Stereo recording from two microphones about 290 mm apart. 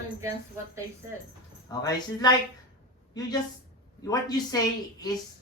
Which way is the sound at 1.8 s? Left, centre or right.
Centre.